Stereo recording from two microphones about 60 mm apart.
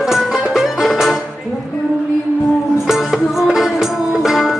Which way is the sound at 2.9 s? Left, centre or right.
Centre.